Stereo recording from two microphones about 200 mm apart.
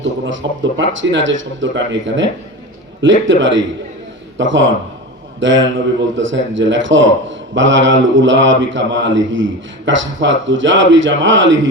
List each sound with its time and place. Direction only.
0.0 s a man's voice: 70° right (ahead or behind)